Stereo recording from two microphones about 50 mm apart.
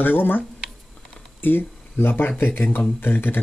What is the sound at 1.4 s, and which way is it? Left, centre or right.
Speech, left.